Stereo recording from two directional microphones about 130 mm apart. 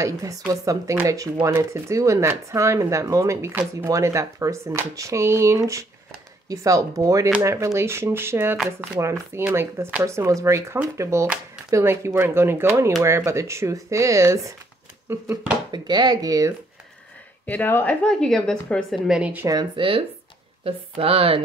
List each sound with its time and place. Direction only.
0.0 s speech: 25° right (ahead or behind)
15.7 s speech: 35° right (ahead or behind)
17.5 s a woman's voice: 15° left (ahead or behind)
19.0 s speech: 10° right (ahead or behind)
19.4 s speech: 30° right (ahead or behind); by 21.4 s 45° right (ahead or behind)